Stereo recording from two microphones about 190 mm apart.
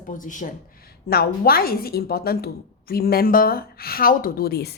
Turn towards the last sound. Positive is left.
turn(degrees=55)  # may be behind; listen again after turning